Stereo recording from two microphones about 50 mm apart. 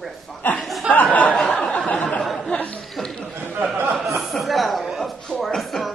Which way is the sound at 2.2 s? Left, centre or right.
Centre.